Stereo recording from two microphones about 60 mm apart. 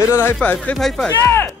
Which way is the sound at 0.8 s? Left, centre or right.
Centre.